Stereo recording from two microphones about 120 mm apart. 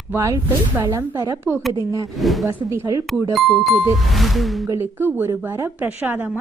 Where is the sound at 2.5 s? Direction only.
20° right (ahead or behind).